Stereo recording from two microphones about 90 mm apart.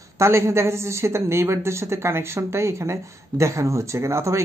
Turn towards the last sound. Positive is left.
turn(degrees=-30)  # may be behind; listen again after turning